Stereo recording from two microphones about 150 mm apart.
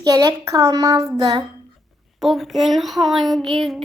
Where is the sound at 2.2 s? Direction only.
Centre (ahead or behind).